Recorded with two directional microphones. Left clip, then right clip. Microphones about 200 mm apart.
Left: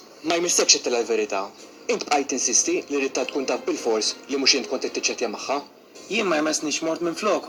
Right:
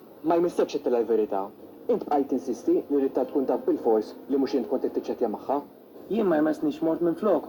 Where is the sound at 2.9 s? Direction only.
25° left (ahead or behind).